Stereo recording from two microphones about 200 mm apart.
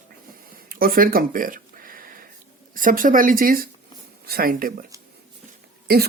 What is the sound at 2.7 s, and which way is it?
Speech, 40° right (ahead or behind).